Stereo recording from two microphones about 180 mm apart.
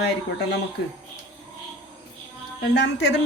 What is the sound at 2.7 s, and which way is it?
Speech, 70° left (ahead or behind).